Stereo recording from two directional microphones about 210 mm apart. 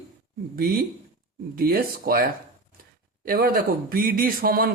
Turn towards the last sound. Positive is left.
turn(degrees=-45)  # may be behind; listen again after turning